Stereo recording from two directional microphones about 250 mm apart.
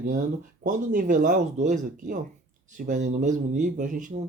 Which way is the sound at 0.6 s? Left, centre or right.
Right.